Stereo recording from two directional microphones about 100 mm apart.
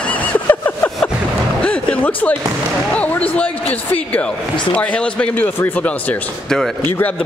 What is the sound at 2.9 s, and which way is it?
Speech, 15° left (ahead or behind).